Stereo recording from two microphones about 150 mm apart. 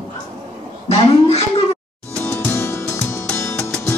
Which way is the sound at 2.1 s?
15° left (ahead or behind).